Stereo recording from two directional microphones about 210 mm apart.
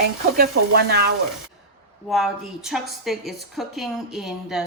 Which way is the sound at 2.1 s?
Centre (ahead or behind).